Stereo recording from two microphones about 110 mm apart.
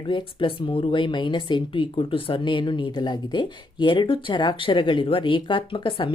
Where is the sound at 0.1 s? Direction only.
50° left (ahead or behind).